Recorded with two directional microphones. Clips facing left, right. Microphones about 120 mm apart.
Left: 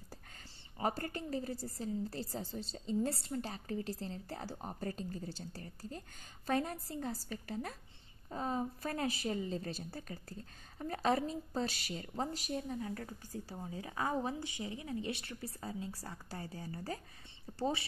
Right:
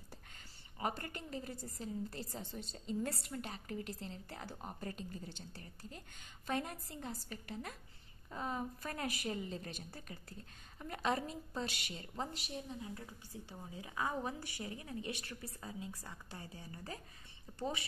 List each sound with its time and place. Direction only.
0.7 s a woman's voice: 35° left (ahead or behind)
13.3 s a woman's voice: 40° left (ahead or behind)